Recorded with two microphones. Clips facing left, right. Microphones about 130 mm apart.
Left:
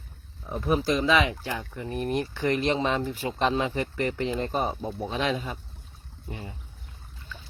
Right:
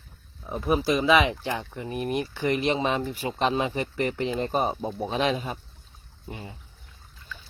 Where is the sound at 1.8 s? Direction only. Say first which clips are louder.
Even; 10° right (ahead or behind).